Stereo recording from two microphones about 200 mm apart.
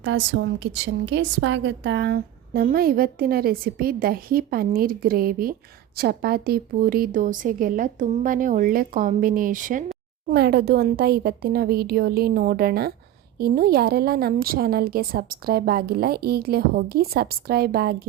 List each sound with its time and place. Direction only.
0.0 s a woman's voice: 65° right (ahead or behind); by 9.8 s 40° right (ahead or behind)
10.2 s a woman's voice: 55° right (ahead or behind)